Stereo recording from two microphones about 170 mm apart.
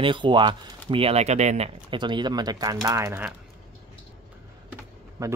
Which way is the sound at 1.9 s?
25° right (ahead or behind).